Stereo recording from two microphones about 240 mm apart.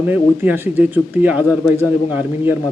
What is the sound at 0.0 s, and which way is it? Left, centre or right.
Speech, centre.